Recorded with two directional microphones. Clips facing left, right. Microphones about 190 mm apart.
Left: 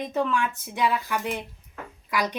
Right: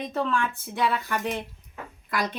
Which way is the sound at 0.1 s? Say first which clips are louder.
Left 1 dB; 10° left (ahead or behind).